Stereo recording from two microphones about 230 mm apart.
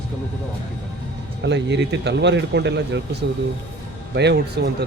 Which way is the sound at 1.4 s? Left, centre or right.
Right.